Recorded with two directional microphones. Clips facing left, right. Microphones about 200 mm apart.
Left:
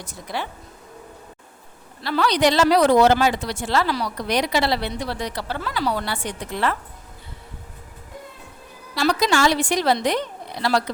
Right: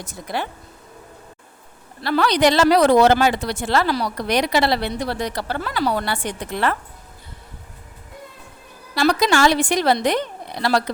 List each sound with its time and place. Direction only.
2.0 s a woman's voice: 60° right (ahead or behind)
3.8 s speech: 45° right (ahead or behind)
4.3 s a woman's voice: 65° right (ahead or behind)
9.0 s a woman's voice: 60° right (ahead or behind)